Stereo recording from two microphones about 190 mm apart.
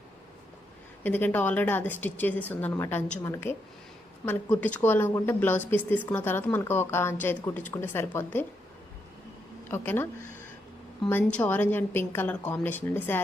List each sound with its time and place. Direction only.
1.0 s speech: 10° left (ahead or behind)
9.6 s speech: 10° left (ahead or behind)